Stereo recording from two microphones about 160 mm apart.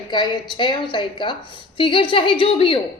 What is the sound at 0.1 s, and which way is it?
A woman's voice, 30° left (ahead or behind).